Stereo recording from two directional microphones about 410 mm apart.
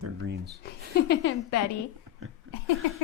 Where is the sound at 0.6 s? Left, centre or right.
Left.